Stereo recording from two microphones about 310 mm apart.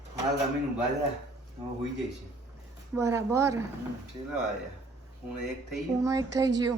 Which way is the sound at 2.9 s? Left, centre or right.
Centre.